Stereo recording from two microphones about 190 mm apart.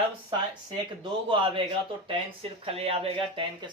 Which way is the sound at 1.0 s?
25° right (ahead or behind).